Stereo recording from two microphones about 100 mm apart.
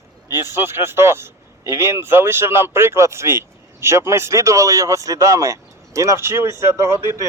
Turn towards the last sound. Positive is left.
turn(degrees=-30)  # may be behind; listen again after turning